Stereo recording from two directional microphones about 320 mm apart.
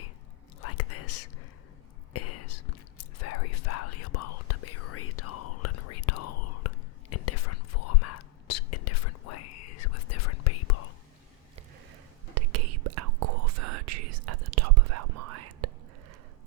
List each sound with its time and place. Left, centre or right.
0.6 s whispering: left
2.1 s whispering: left
12.3 s whispering: right